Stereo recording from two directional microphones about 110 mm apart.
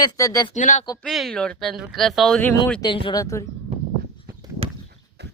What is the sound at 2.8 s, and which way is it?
Speech, 45° left (ahead or behind).